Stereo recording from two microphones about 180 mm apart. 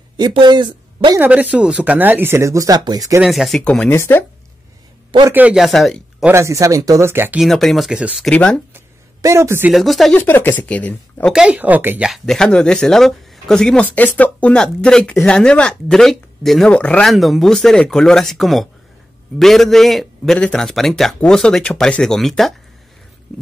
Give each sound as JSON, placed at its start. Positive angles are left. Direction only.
{"t": 0.2, "sound": "speech", "side_deg": -25}
{"t": 1.2, "sound": "speech", "side_deg": -10}
{"t": 3.2, "sound": "speech", "side_deg": 0}
{"t": 5.3, "sound": "speech", "side_deg": -5}
{"t": 6.3, "sound": "speech", "side_deg": -15}
{"t": 7.4, "sound": "speech", "side_deg": 0}
{"t": 8.3, "sound": "speech", "side_deg": 5}
{"t": 8.7, "sound": "a sound", "side_deg": -15}
{"t": 9.7, "sound": "speech", "side_deg": 0}
{"t": 11.3, "sound": "speech", "side_deg": -5}
{"t": 12.1, "sound": "speech", "side_deg": 5}